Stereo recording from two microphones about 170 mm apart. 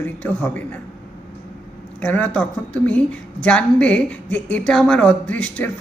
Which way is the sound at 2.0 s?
10° left (ahead or behind).